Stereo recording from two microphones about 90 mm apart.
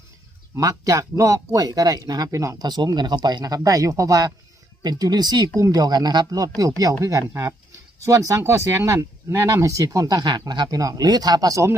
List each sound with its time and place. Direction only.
0.6 s speech: 45° right (ahead or behind)
2.3 s speech: 35° right (ahead or behind)
2.6 s speech: 55° right (ahead or behind)